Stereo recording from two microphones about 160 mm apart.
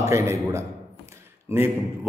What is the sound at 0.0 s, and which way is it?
A man's voice, 20° right (ahead or behind).